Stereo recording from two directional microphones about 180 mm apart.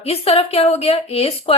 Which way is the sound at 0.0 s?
35° left (ahead or behind).